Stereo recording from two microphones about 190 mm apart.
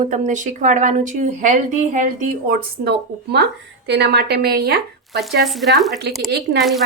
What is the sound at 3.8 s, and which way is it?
Speech, 60° right (ahead or behind).